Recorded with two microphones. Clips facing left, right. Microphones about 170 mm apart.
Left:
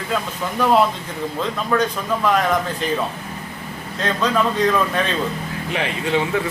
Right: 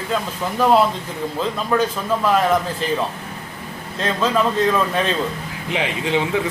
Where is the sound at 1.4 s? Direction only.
5° right (ahead or behind).